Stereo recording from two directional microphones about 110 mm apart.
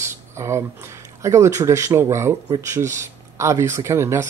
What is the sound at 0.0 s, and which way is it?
Speech, 25° right (ahead or behind).